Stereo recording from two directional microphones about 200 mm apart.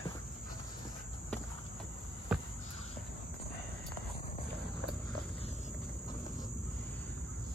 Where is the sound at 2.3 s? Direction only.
5° right (ahead or behind).